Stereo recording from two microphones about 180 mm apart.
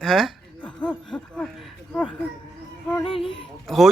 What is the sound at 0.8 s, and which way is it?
Speech, 5° left (ahead or behind).